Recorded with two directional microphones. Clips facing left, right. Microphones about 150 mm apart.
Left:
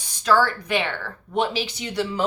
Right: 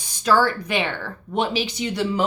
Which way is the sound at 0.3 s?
15° right (ahead or behind).